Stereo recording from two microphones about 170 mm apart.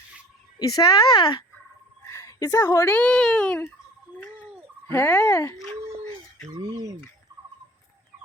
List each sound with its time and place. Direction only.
0.6 s speech: 20° left (ahead or behind); by 3.7 s 5° left (ahead or behind)
4.9 s speech: 10° left (ahead or behind)
6.6 s speech: 20° right (ahead or behind)